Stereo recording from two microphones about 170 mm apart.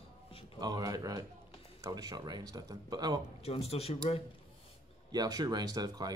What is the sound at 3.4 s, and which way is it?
Speech, 35° left (ahead or behind).